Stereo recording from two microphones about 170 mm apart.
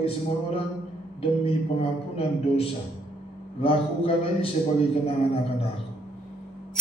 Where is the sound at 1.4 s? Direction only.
35° left (ahead or behind).